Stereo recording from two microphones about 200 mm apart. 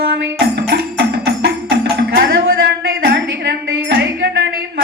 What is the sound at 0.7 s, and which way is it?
Music, 55° right (ahead or behind).